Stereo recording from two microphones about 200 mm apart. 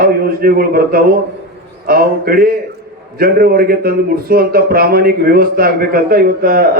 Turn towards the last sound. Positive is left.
turn(degrees=-45)  # may be behind; listen again after turning